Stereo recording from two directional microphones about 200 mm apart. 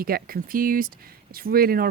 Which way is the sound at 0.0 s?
50° right (ahead or behind).